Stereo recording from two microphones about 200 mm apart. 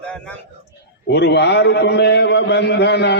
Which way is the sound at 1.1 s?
60° left (ahead or behind).